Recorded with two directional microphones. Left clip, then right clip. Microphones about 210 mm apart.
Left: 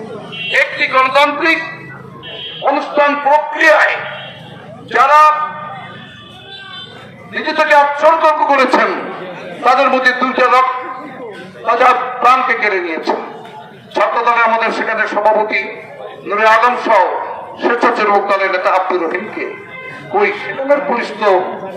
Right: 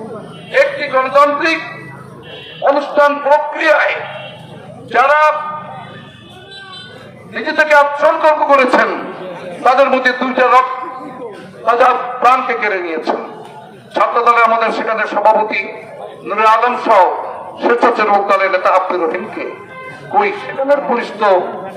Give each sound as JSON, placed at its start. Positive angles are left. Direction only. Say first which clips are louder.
{"t": 0.6, "sound": "a man's voice", "louder": "even", "side_deg": -50}
{"t": 2.6, "sound": "a man's voice", "louder": "right 2 dB", "side_deg": -50}
{"t": 7.3, "sound": "a man's voice", "louder": "even", "side_deg": -45}
{"t": 11.6, "sound": "a man's voice", "louder": "even", "side_deg": -45}
{"t": 20.9, "sound": "a man's voice", "louder": "right 1 dB", "side_deg": -45}